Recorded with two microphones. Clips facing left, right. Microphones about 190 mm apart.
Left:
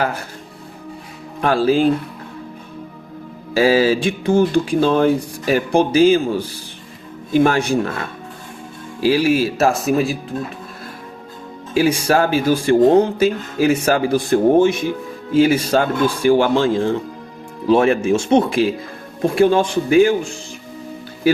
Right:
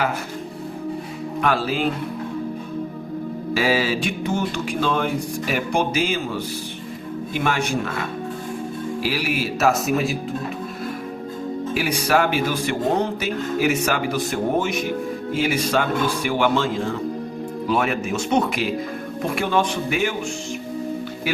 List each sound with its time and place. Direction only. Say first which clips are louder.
1.4 s speech: left 7 dB; 30° left (ahead or behind)
3.5 s speech: left 7 dB; 30° left (ahead or behind)
7.3 s speech: left 9 dB; 35° left (ahead or behind)
9.0 s speech: left 12 dB; 30° left (ahead or behind)
11.7 s speech: left 6 dB; 30° left (ahead or behind)